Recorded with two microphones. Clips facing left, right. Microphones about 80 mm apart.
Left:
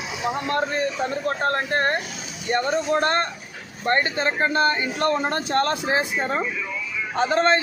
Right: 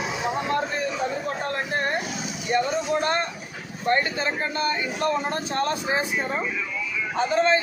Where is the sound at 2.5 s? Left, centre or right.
Left.